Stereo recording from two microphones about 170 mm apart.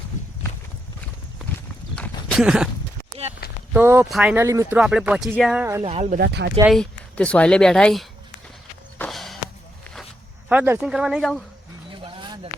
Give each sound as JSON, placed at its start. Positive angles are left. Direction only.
{"t": 2.0, "sound": "horse", "side_deg": 0}
{"t": 3.7, "sound": "speech", "side_deg": -10}
{"t": 4.8, "sound": "speech", "side_deg": -5}
{"t": 5.8, "sound": "speech", "side_deg": -35}
{"t": 6.1, "sound": "speech", "side_deg": -70}
{"t": 6.7, "sound": "speech", "side_deg": 5}
{"t": 9.0, "sound": "walk", "side_deg": 0}
{"t": 10.5, "sound": "speech", "side_deg": -10}
{"t": 11.9, "sound": "a sound", "side_deg": -30}